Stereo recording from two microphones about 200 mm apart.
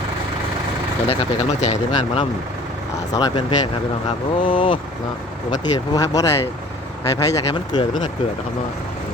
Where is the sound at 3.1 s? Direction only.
20° left (ahead or behind).